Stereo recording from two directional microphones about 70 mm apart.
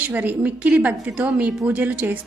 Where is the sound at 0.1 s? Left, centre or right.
Right.